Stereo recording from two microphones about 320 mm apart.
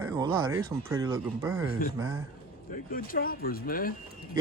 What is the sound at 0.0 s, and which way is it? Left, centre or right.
Speech, centre.